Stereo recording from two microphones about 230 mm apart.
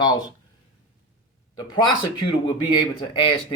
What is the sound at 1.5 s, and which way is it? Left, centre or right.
A man's voice, centre.